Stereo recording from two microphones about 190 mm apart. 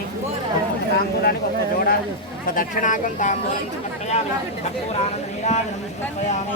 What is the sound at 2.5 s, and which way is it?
Speech, 45° left (ahead or behind).